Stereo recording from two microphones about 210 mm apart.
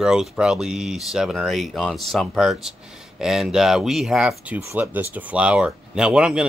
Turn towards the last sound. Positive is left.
turn(degrees=-5)  # may be behind; listen again after turning